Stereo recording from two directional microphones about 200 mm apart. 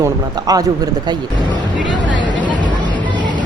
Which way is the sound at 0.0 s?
20° right (ahead or behind).